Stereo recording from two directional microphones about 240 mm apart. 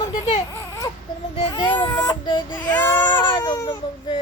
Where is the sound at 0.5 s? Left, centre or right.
Centre.